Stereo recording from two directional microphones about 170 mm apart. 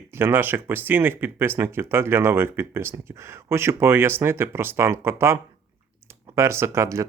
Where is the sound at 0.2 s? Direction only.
15° right (ahead or behind).